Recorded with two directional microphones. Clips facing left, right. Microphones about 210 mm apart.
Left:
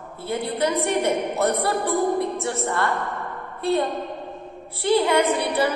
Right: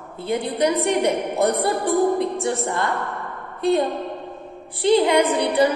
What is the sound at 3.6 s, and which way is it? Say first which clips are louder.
A woman's voice: right 3 dB; 15° right (ahead or behind).